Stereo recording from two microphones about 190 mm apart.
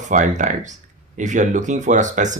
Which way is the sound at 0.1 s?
40° right (ahead or behind).